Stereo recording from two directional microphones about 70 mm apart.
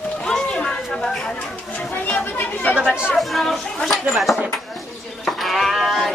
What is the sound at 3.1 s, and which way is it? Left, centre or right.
A woman's voice, centre.